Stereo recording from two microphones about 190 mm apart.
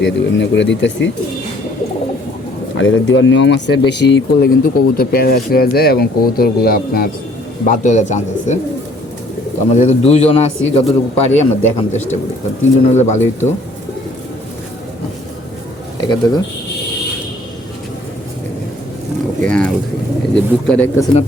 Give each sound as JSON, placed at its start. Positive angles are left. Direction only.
{"t": 0.0, "sound": "speech", "side_deg": 70}
{"t": 2.7, "sound": "a man's voice", "side_deg": 85}
{"t": 9.7, "sound": "a man's voice", "side_deg": 35}
{"t": 16.0, "sound": "speech", "side_deg": 20}
{"t": 19.5, "sound": "pigeon", "side_deg": 5}
{"t": 20.3, "sound": "speech", "side_deg": 5}